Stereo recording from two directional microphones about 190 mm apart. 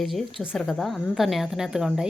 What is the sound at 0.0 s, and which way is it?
A woman's voice, centre (ahead or behind).